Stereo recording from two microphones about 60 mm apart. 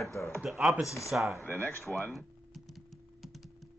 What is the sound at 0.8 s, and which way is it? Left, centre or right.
Speech, left.